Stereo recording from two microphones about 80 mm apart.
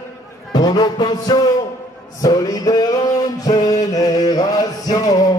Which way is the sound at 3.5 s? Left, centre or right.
Left.